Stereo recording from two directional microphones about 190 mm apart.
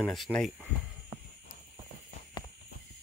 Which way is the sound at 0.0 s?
5° left (ahead or behind).